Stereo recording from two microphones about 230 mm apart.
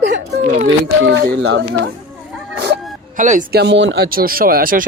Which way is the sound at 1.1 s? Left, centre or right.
Right.